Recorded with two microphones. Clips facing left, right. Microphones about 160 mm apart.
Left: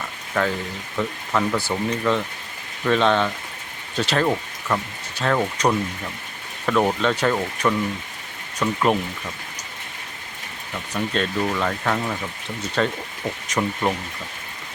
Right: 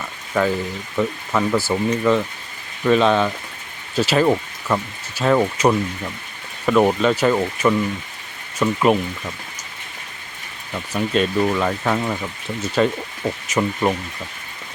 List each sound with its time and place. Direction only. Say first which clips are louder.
0.4 s speech: right 4 dB; 10° right (ahead or behind)
10.9 s speech: right 5 dB; 10° right (ahead or behind)